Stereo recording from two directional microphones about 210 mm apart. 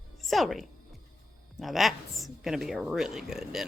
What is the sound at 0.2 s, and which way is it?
A woman's voice, centre (ahead or behind).